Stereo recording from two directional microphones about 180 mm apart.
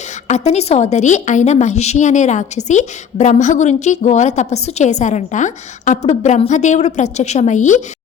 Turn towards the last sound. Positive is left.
turn(degrees=45)  # may be behind; listen again after turning